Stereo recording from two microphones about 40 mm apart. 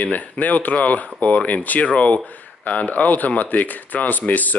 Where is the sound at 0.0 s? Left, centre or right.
Left.